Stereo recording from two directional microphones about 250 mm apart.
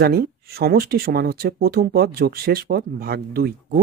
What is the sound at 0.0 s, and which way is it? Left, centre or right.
Speech, right.